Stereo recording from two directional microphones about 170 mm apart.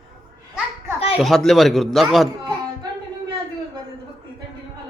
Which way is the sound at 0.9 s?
35° left (ahead or behind).